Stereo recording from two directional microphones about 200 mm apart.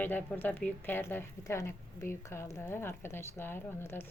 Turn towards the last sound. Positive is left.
turn(degrees=10)  # may be behind; listen again after turning